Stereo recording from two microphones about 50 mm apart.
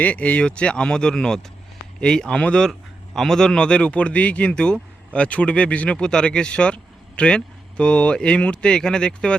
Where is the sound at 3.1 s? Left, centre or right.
Centre.